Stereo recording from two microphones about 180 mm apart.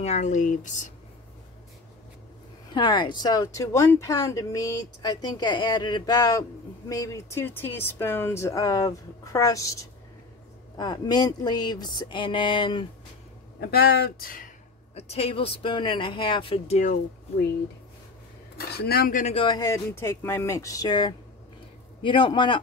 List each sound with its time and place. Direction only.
0.0 s speech: 40° left (ahead or behind)
2.7 s speech: 25° left (ahead or behind)
13.6 s speech: 60° left (ahead or behind)
15.0 s speech: 35° left (ahead or behind)
18.7 s speech: 60° left (ahead or behind)
19.3 s speech: 25° left (ahead or behind)